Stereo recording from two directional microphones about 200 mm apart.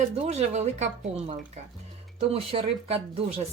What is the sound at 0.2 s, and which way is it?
Speech, 30° right (ahead or behind).